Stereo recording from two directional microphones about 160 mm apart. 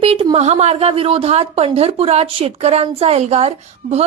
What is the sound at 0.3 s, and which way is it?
A woman's voice, 40° right (ahead or behind).